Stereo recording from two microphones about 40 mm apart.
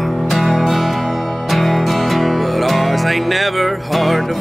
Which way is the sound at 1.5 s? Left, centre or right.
Centre.